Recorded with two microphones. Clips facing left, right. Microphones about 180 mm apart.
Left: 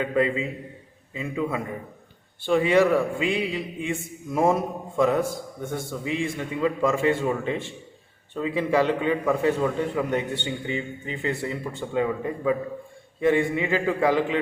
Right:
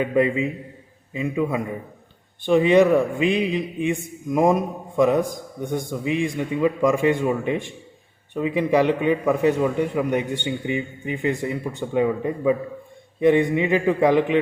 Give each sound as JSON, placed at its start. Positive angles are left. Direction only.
{"t": 0.0, "sound": "a man's voice", "side_deg": -15}